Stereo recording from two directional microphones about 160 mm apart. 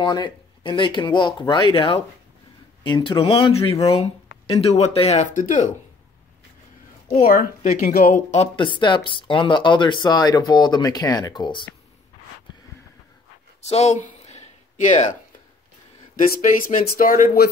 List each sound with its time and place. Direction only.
0.0 s speech: 30° left (ahead or behind); by 5.7 s 55° left (ahead or behind)
7.1 s speech: 50° left (ahead or behind)
8.5 s speech: 30° left (ahead or behind)
13.6 s a sound: 40° left (ahead or behind)
16.2 s speech: 55° left (ahead or behind)